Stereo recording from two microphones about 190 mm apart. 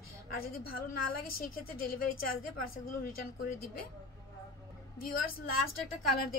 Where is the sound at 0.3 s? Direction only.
50° left (ahead or behind).